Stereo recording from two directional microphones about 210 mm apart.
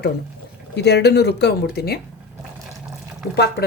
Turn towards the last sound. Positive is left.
turn(degrees=50)  # may be behind; listen again after turning